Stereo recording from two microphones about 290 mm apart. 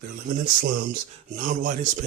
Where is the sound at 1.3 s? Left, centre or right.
Right.